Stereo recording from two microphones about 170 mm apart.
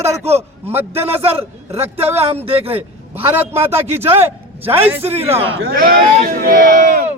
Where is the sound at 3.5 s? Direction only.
15° right (ahead or behind).